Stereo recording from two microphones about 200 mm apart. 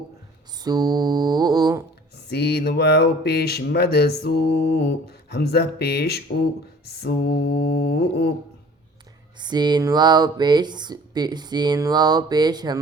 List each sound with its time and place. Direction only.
0.6 s music: 20° right (ahead or behind)
2.1 s speech: 55° left (ahead or behind)
9.4 s speech: 20° right (ahead or behind)